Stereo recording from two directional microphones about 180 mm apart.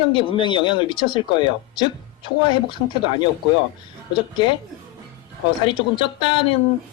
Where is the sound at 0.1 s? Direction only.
30° left (ahead or behind).